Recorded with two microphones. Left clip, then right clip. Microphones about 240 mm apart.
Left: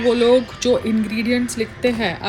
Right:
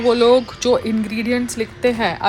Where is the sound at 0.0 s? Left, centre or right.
Centre.